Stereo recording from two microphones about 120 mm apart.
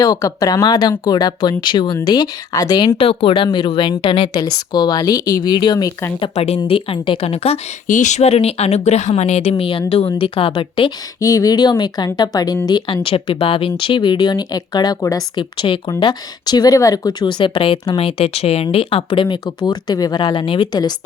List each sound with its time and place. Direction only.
0.0 s speech: 30° left (ahead or behind)
3.0 s speech: 50° left (ahead or behind)
6.3 s speech: 65° left (ahead or behind)
6.7 s speech: 50° left (ahead or behind)
11.2 s speech: 30° left (ahead or behind)